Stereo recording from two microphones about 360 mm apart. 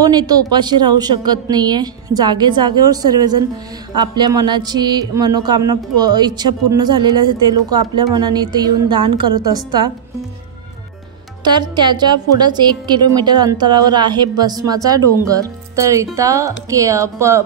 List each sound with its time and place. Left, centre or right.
0.0 s a woman's voice: centre
11.4 s a woman's voice: centre